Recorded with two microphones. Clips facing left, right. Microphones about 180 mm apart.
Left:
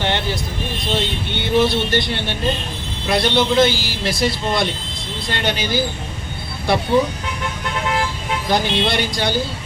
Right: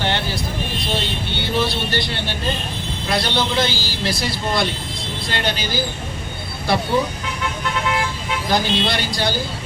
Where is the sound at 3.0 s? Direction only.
20° left (ahead or behind).